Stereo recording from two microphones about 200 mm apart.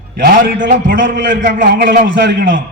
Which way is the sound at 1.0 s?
70° right (ahead or behind).